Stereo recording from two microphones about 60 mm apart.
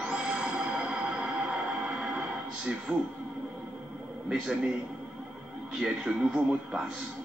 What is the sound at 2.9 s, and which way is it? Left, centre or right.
Speech, right.